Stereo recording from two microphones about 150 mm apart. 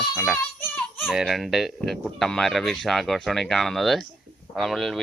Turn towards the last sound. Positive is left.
turn(degrees=0)  # may be behind; listen again after turning